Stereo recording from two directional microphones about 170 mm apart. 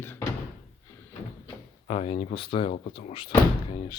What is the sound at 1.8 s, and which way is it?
Speech, 35° left (ahead or behind).